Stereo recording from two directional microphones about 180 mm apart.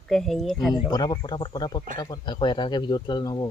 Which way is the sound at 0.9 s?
20° left (ahead or behind).